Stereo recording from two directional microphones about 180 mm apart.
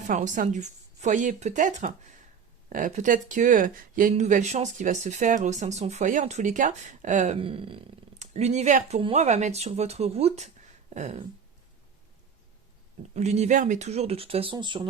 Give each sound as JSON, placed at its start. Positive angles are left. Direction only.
{"t": 0.1, "sound": "speech", "side_deg": -45}
{"t": 7.3, "sound": "speech", "side_deg": -30}
{"t": 13.1, "sound": "speech", "side_deg": -35}